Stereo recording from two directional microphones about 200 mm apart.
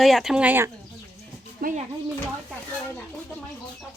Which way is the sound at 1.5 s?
45° right (ahead or behind).